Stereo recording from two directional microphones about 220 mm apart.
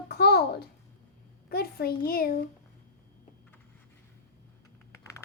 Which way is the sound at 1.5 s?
45° left (ahead or behind).